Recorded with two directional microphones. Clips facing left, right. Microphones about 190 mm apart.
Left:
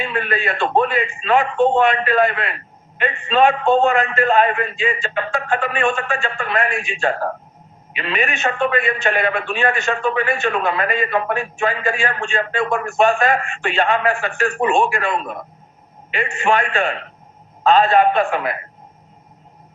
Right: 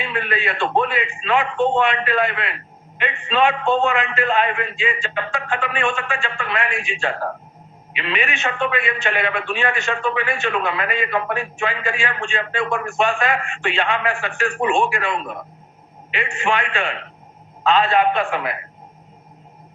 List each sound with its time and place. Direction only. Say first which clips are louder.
0.0 s a man's voice: left 2 dB; 45° left (ahead or behind)